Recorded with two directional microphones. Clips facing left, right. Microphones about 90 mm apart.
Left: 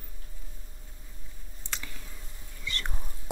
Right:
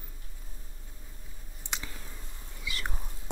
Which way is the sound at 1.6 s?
15° right (ahead or behind).